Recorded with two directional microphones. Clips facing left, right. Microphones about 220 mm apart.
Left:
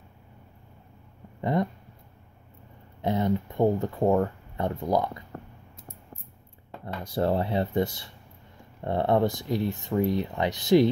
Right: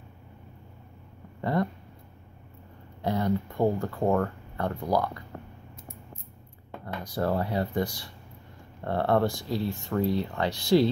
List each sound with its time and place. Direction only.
1.4 s speech: 20° left (ahead or behind)
3.0 s speech: 20° left (ahead or behind)
7.0 s speech: 25° left (ahead or behind)